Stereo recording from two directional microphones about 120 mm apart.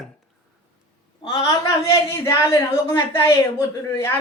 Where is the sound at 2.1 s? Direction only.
20° left (ahead or behind).